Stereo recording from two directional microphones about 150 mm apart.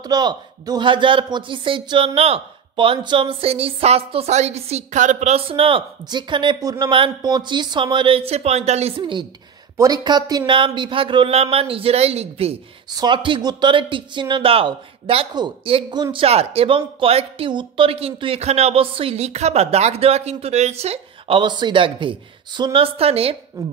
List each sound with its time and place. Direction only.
0.0 s speech: 30° right (ahead or behind)
12.9 s speech: 30° right (ahead or behind)
23.6 s speech: 20° right (ahead or behind)